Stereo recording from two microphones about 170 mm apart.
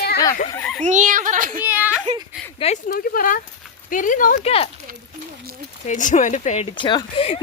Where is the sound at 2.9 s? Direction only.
60° left (ahead or behind).